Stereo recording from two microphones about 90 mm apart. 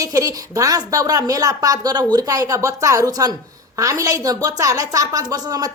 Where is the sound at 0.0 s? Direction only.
40° right (ahead or behind).